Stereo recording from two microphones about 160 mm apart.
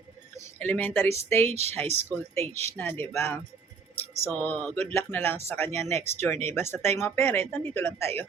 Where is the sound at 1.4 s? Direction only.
40° right (ahead or behind).